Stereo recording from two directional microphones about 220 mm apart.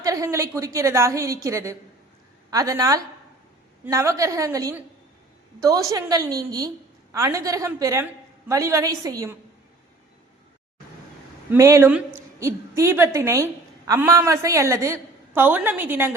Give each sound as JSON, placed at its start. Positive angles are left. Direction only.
{"t": 0.0, "sound": "a woman's voice", "side_deg": -15}
{"t": 11.5, "sound": "a woman's voice", "side_deg": -10}